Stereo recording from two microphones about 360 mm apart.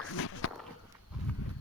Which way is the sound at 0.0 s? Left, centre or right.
Left.